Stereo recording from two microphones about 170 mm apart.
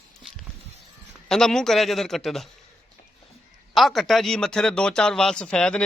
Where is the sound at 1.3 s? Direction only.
5° left (ahead or behind).